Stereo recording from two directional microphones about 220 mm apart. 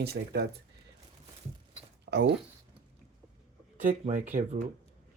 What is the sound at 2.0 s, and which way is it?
Speech, 50° right (ahead or behind).